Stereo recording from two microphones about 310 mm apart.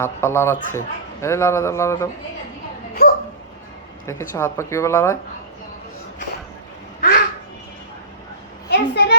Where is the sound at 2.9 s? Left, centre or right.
Left.